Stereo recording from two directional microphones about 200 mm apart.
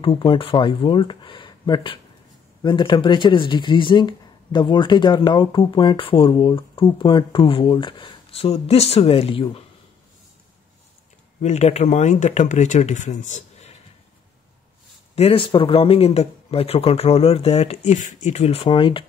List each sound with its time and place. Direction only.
0.0 s speech: 25° left (ahead or behind)
11.4 s speech: 35° left (ahead or behind)
15.1 s speech: 30° left (ahead or behind)